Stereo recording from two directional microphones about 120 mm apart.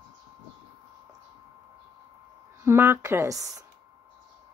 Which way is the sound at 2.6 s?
20° right (ahead or behind).